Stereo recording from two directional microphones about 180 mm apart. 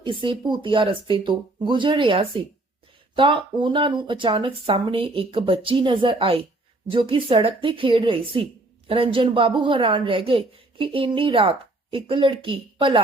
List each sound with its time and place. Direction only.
0.0 s a woman's voice: 30° right (ahead or behind)